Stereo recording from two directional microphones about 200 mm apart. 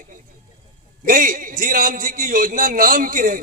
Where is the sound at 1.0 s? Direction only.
40° right (ahead or behind).